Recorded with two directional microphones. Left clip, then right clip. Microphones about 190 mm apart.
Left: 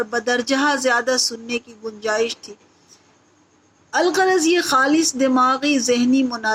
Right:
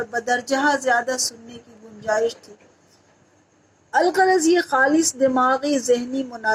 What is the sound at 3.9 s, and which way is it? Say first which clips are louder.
A woman's voice: even; 40° left (ahead or behind).